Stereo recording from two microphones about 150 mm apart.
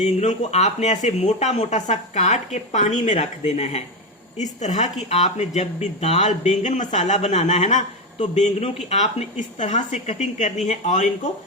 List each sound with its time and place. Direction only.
0.0 s speech: 45° left (ahead or behind)